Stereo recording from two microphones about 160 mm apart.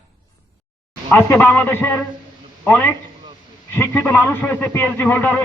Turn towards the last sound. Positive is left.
turn(degrees=10)  # may be behind; listen again after turning